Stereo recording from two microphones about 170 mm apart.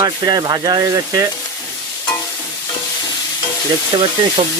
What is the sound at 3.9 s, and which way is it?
Speech, 30° right (ahead or behind).